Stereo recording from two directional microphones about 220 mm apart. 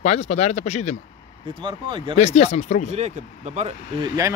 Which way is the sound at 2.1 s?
30° left (ahead or behind).